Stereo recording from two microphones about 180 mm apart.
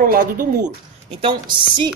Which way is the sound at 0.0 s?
50° right (ahead or behind).